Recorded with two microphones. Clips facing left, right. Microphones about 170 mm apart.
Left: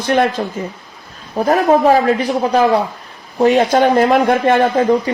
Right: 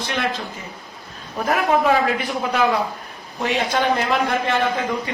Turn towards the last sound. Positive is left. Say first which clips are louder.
# left 9 dB
turn(degrees=40)  # may be behind; listen again after turning